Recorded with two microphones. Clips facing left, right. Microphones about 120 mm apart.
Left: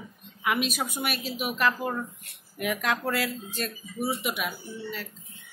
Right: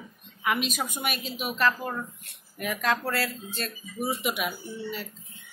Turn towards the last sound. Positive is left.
turn(degrees=-5)  # may be behind; listen again after turning